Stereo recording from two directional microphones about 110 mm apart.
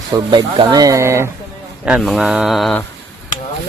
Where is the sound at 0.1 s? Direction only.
45° right (ahead or behind); by 1.3 s 25° right (ahead or behind).